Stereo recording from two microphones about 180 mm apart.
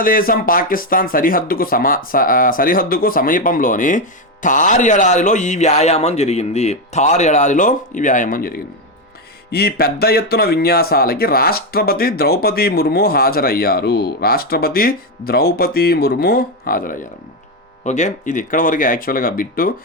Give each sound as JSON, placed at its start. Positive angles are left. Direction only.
{"t": 0.0, "sound": "a man's voice", "side_deg": 55}